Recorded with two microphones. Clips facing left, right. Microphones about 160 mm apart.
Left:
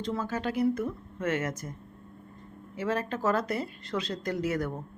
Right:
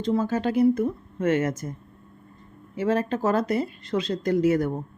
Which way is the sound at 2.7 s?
25° right (ahead or behind).